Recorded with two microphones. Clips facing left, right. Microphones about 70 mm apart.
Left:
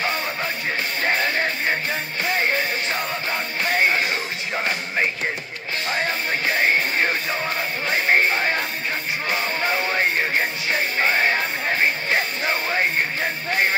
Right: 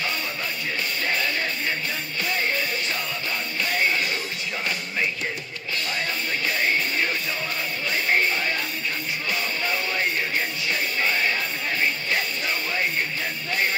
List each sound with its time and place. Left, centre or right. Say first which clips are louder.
1.0 s music: left 5 dB; left